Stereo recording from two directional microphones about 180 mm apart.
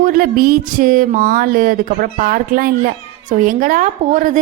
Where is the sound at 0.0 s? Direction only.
50° right (ahead or behind).